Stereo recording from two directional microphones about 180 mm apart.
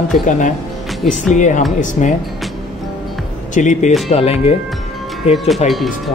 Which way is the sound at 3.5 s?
45° left (ahead or behind).